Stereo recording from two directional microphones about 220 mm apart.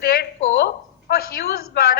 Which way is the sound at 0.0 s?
45° left (ahead or behind).